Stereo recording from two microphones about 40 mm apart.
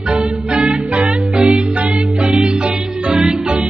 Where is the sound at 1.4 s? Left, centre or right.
Centre.